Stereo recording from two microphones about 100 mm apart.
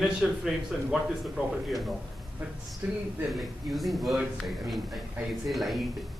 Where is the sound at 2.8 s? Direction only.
20° right (ahead or behind).